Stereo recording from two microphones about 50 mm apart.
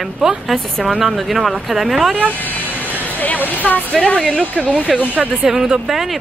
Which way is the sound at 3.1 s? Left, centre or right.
Left.